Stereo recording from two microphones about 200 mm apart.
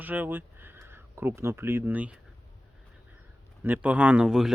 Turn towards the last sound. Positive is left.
turn(degrees=-5)  # may be behind; listen again after turning